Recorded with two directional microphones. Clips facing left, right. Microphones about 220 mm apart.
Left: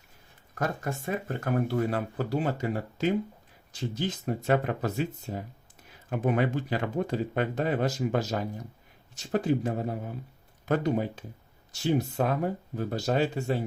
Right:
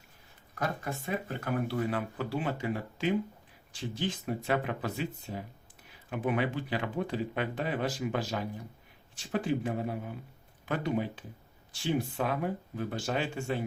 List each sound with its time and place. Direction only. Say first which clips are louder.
0.5 s speech: left 3 dB; 45° left (ahead or behind)